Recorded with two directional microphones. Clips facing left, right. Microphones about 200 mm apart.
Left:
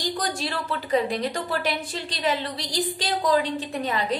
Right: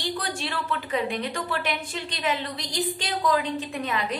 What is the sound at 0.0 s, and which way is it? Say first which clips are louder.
A woman's voice: left 2 dB; 40° left (ahead or behind).